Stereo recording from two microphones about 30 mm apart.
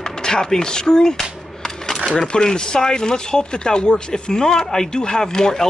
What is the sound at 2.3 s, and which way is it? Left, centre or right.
Speech, left.